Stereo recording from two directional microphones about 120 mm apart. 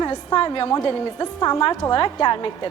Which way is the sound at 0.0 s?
35° left (ahead or behind).